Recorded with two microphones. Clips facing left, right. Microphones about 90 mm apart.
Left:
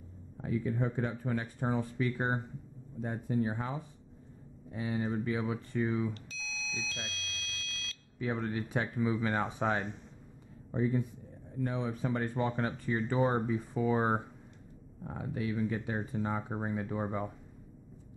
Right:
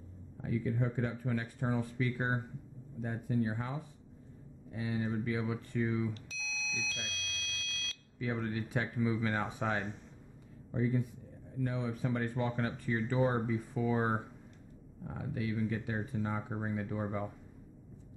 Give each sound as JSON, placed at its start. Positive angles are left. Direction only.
{"t": 0.4, "sound": "speech", "side_deg": 35}
{"t": 6.1, "sound": "alarm", "side_deg": 0}
{"t": 8.2, "sound": "a man's voice", "side_deg": 35}